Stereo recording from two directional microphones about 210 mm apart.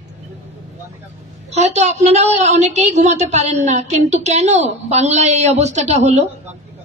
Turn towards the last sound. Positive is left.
turn(degrees=-35)  # may be behind; listen again after turning